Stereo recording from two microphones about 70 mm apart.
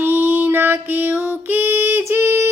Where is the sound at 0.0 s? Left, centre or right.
Right.